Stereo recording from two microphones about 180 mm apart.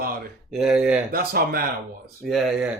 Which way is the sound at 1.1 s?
55° right (ahead or behind).